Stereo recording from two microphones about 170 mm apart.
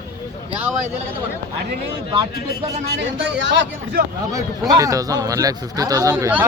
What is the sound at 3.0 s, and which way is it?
Speech, 90° right.